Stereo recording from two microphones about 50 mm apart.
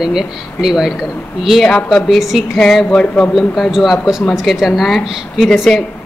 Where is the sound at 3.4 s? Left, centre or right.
Centre.